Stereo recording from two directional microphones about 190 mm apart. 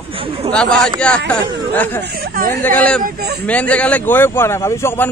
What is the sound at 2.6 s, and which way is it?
Speech, 5° left (ahead or behind).